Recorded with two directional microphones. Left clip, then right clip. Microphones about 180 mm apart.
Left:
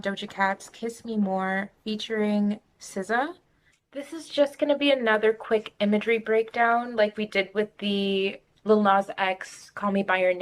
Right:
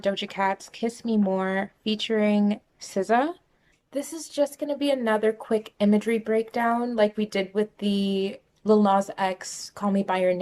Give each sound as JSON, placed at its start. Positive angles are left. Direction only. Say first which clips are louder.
{"t": 0.0, "sound": "speech", "louder": "right 1 dB", "side_deg": -5}
{"t": 3.9, "sound": "speech", "louder": "left 1 dB", "side_deg": -35}